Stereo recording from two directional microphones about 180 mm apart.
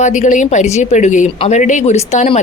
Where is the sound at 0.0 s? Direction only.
45° left (ahead or behind).